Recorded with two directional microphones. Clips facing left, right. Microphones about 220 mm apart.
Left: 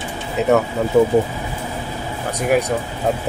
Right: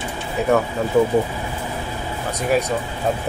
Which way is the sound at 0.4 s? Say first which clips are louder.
Left 3 dB; 20° left (ahead or behind).